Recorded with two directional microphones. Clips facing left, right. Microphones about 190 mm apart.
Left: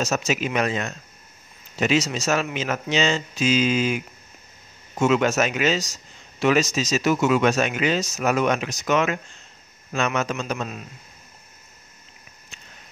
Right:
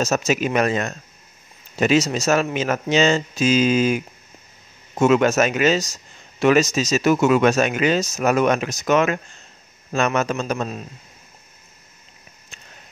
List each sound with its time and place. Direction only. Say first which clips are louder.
0.0 s speech: right 4 dB; 45° right (ahead or behind)